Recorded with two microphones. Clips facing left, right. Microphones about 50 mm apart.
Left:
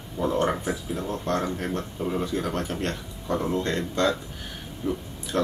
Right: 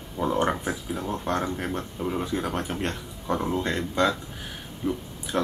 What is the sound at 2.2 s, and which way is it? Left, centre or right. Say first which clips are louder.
Speech: left 1 dB; centre.